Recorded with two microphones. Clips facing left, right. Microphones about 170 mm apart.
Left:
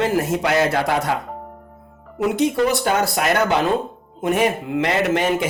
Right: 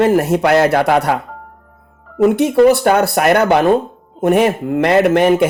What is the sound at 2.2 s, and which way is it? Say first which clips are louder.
A man's voice: right 8 dB; 55° right (ahead or behind).